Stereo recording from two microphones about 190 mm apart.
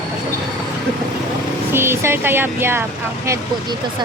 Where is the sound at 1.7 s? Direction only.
10° right (ahead or behind).